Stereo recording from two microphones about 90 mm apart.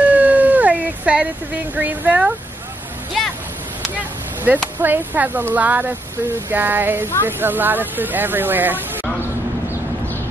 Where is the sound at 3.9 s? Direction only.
20° right (ahead or behind).